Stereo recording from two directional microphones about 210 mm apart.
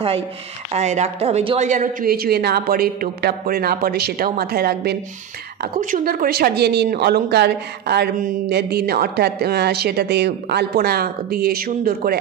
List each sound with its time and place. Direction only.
0.7 s a woman's voice: 30° right (ahead or behind)